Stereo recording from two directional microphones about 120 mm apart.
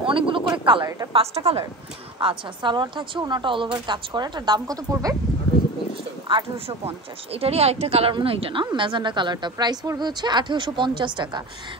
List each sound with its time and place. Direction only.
0.0 s a sound: 45° right (ahead or behind)
1.1 s a woman's voice: 55° right (ahead or behind)
2.1 s a woman's voice: 40° right (ahead or behind)
7.3 s a woman's voice: 55° right (ahead or behind)
8.1 s a woman's voice: 50° right (ahead or behind)